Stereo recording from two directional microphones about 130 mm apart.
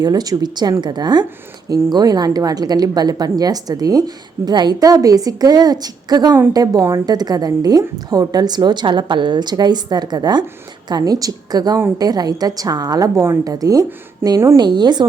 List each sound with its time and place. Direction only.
0.0 s a woman's voice: 30° right (ahead or behind)
14.6 s a woman's voice: 35° right (ahead or behind)